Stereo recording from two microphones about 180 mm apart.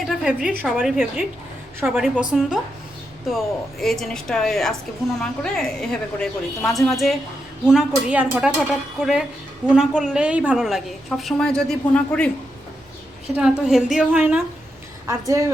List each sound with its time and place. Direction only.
0.0 s a sound: centre (ahead or behind)
0.6 s a woman's voice: centre (ahead or behind)
13.3 s a woman's voice: 5° right (ahead or behind)
15.0 s a woman's voice: 20° right (ahead or behind)